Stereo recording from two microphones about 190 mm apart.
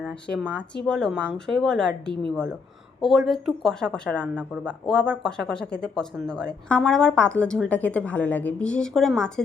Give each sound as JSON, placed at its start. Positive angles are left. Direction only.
{"t": 0.0, "sound": "speech", "side_deg": 0}